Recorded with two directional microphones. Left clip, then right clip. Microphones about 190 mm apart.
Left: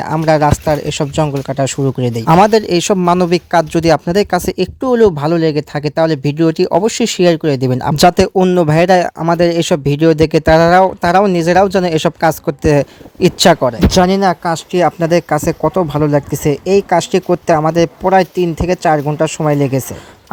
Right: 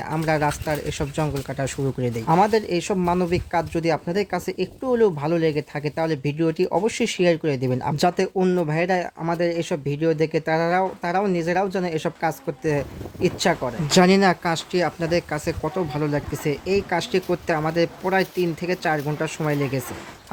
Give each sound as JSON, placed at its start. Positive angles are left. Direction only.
{"t": 0.0, "sound": "speech", "side_deg": 50}
{"t": 13.9, "sound": "speech", "side_deg": 20}
{"t": 14.5, "sound": "speech", "side_deg": 40}